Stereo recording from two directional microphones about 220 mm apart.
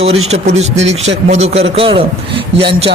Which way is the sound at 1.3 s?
30° right (ahead or behind).